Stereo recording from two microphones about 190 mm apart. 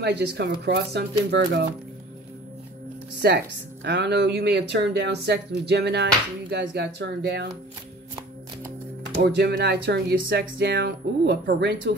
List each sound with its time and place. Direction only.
0.0 s speech: 60° right (ahead or behind)
3.2 s speech: 60° right (ahead or behind)
9.2 s speech: 60° right (ahead or behind)